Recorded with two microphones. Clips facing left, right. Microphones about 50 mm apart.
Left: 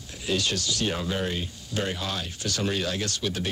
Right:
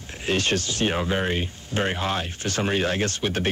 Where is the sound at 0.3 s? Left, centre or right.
Right.